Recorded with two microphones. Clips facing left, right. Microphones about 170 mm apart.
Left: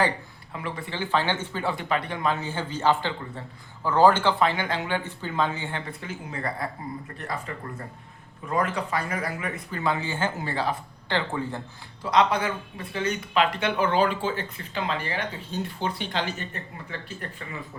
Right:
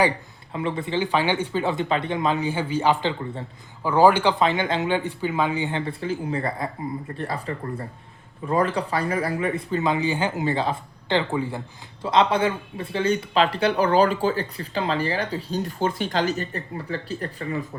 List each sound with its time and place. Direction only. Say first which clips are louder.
0.5 s speech: right 8 dB; 25° right (ahead or behind)
5.9 s speech: right 9 dB; 30° right (ahead or behind)
9.8 s speech: right 2 dB; 15° right (ahead or behind)
12.1 s speech: right 3 dB; 25° right (ahead or behind)